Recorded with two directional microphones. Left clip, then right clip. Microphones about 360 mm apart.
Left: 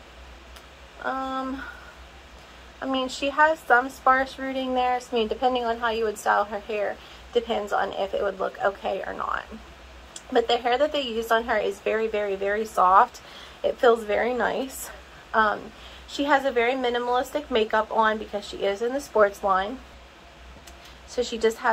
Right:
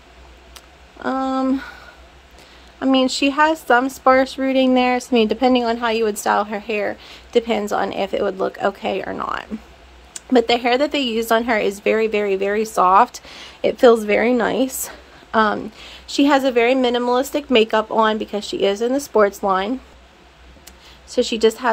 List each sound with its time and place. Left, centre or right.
1.0 s a sound: right
2.8 s a woman's voice: right
21.1 s speech: right